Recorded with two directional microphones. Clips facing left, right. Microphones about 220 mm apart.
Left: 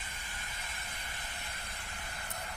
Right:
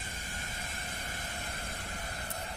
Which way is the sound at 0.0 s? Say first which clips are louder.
Right 5 dB; 45° right (ahead or behind).